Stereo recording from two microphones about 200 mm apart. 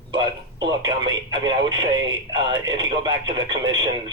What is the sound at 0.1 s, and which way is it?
Speech, 20° right (ahead or behind).